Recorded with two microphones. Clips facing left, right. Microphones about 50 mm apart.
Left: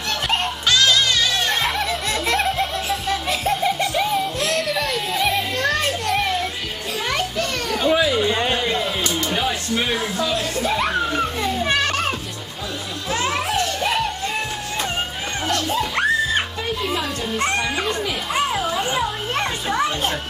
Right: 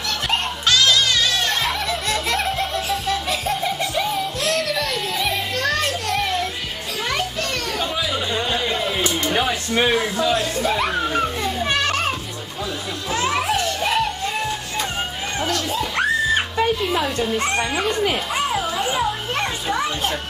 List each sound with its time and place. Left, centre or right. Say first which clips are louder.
0.3 s music: even; centre
7.1 s children playing: left 1 dB; centre
8.3 s a sound: left 3 dB; left
8.5 s a sound: even; centre
9.2 s a sound: right 1 dB; centre
10.6 s children playing: even; centre
13.1 s music: right 1 dB; centre
15.8 s music: right 1 dB; centre
17.6 s speech: right 1 dB; centre
18.3 s children playing: left 1 dB; centre